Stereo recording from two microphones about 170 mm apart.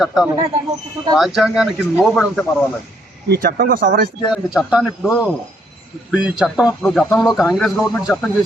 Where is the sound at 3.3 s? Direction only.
65° right (ahead or behind).